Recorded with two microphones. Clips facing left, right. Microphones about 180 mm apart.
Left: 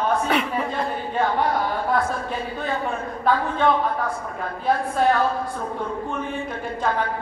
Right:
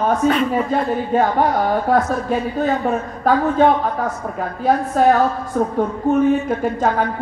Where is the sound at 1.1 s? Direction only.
45° right (ahead or behind).